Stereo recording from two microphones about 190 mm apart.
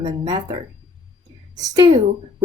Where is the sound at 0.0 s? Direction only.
20° right (ahead or behind).